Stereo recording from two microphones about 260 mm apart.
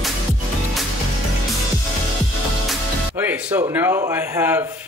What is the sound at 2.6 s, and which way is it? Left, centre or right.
Speech, centre.